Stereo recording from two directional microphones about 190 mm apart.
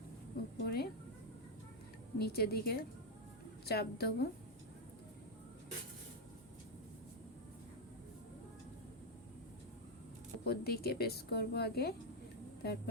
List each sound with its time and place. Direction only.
0.6 s a woman's voice: 55° left (ahead or behind)
2.1 s a woman's voice: 55° left (ahead or behind)
10.4 s a woman's voice: 55° left (ahead or behind)